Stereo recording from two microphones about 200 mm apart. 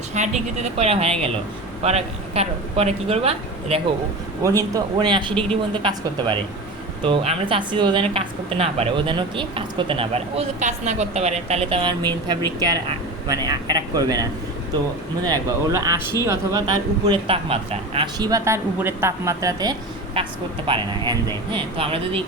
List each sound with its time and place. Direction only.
0.1 s speech: 35° right (ahead or behind)
4.4 s speech: 15° right (ahead or behind)